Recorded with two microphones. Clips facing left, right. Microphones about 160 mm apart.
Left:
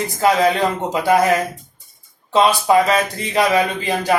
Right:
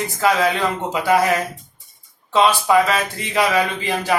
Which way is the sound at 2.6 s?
40° left (ahead or behind).